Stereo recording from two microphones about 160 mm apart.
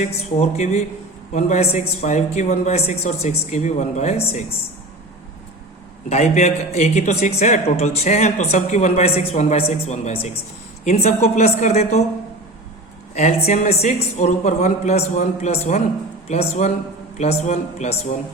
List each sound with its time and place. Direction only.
0.0 s speech: 45° left (ahead or behind)
6.1 s speech: 40° left (ahead or behind)
13.1 s speech: 45° left (ahead or behind)